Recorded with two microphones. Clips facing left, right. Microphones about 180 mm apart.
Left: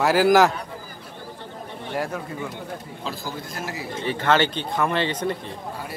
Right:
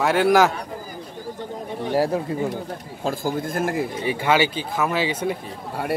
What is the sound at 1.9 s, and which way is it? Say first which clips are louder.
Speech: right 7 dB; 35° right (ahead or behind).